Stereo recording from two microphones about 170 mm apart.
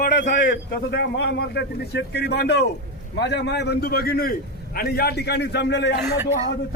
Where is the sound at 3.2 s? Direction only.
90° left.